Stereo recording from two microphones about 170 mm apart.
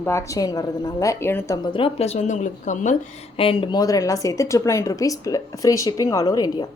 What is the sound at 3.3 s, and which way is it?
A woman's voice, 35° left (ahead or behind).